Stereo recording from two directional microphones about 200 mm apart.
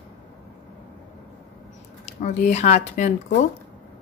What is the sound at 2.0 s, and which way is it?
Speech, 35° left (ahead or behind).